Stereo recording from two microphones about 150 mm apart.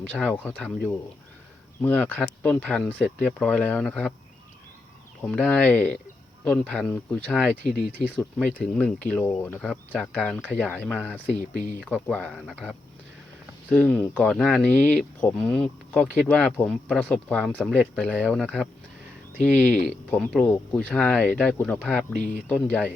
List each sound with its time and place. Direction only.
0.1 s speech: 10° left (ahead or behind)
5.4 s speech: 10° left (ahead or behind)
11.3 s speech: 55° left (ahead or behind)
12.3 s speech: 5° right (ahead or behind)
13.7 s speech: 10° left (ahead or behind)
20.1 s speech: 5° left (ahead or behind)
22.2 s speech: 55° left (ahead or behind)
22.6 s speech: 10° left (ahead or behind)